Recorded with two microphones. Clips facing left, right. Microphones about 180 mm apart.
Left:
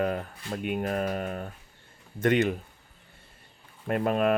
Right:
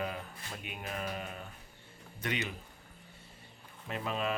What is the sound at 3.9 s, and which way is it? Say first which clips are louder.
Speech: left 11 dB; 55° left (ahead or behind).